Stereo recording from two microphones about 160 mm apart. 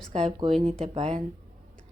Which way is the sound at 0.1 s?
40° right (ahead or behind).